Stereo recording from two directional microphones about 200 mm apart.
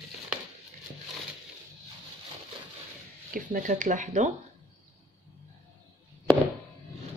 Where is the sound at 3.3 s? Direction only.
40° right (ahead or behind).